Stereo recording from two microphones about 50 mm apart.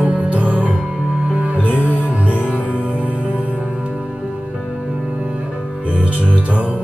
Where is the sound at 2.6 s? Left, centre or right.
Left.